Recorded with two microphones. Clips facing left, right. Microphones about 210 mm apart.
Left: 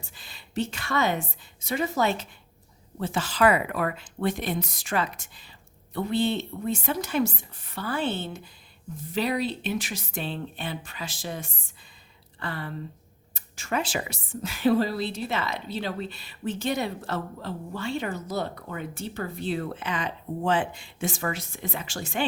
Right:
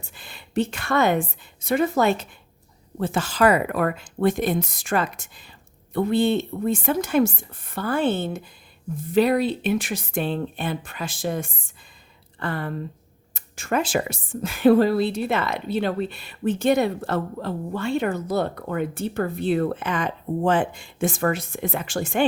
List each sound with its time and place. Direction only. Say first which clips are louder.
0.1 s a woman's voice: right 7 dB; 55° right (ahead or behind)